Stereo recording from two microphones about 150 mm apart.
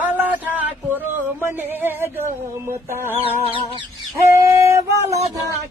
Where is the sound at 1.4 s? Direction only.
15° right (ahead or behind).